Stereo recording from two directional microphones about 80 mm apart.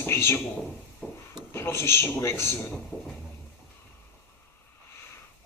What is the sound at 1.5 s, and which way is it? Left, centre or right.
Speech, left.